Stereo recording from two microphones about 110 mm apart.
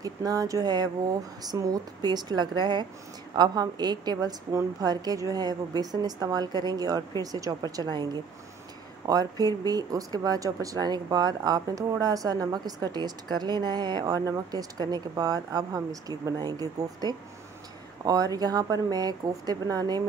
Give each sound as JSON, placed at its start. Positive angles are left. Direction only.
{"t": 0.0, "sound": "speech", "side_deg": -35}